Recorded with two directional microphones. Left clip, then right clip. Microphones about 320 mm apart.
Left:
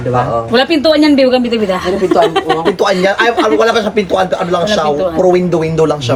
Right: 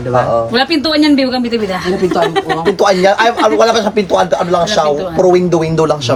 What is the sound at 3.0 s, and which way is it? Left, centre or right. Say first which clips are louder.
Speech: right 1 dB; centre.